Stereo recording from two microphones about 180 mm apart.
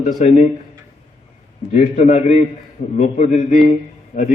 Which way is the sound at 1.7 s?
45° left (ahead or behind).